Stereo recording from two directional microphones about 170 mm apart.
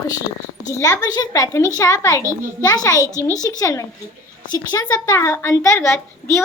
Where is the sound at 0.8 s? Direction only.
20° left (ahead or behind).